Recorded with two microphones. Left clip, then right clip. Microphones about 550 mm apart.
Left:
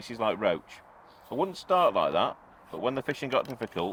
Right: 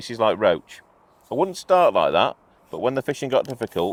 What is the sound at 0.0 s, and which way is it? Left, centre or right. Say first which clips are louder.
Speech: right 9 dB; right.